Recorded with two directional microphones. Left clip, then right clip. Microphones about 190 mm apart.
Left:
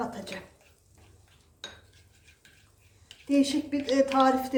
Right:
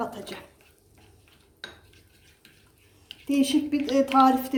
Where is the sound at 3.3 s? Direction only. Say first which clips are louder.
Right 2 dB; 40° right (ahead or behind).